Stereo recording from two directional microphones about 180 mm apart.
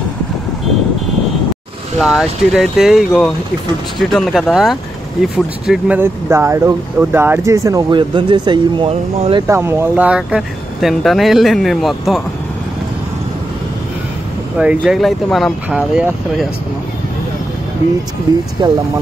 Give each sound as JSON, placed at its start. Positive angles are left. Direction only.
{"t": 2.0, "sound": "speech", "side_deg": 0}
{"t": 9.5, "sound": "speech", "side_deg": -15}
{"t": 14.6, "sound": "speech", "side_deg": -5}
{"t": 18.6, "sound": "speech", "side_deg": -25}